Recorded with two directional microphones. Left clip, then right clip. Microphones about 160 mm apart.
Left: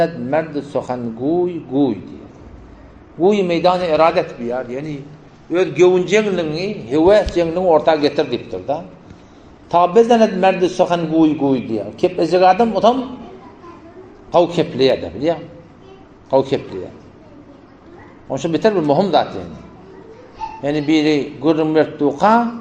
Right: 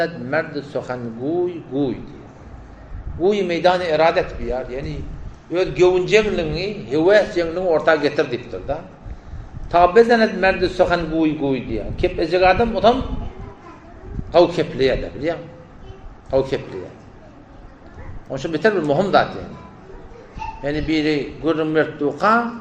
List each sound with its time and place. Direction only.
0.0 s a man's voice: 45° left (ahead or behind)
3.2 s a man's voice: 40° left (ahead or behind)
11.4 s a man's voice: 55° left (ahead or behind)
14.3 s a man's voice: 40° left (ahead or behind)
18.3 s a man's voice: 40° left (ahead or behind)
20.6 s a man's voice: 40° left (ahead or behind)